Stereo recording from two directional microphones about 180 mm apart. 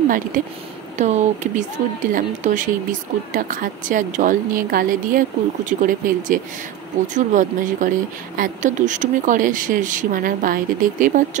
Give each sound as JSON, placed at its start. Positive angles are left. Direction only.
{"t": 0.3, "sound": "speech", "side_deg": -45}